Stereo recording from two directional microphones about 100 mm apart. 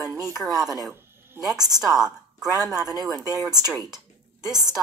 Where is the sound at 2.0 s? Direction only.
5° right (ahead or behind).